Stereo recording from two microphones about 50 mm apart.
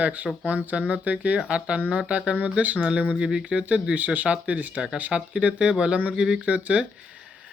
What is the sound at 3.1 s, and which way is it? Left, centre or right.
Speech, centre.